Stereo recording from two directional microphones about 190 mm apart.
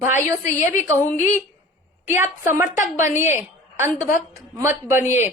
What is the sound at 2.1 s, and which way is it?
Speech, 15° right (ahead or behind).